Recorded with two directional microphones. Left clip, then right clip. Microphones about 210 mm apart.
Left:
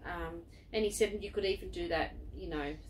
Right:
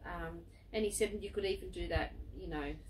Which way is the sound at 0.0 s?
10° right (ahead or behind).